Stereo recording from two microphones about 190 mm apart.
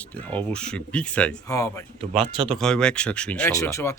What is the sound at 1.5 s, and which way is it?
Speech, 15° left (ahead or behind).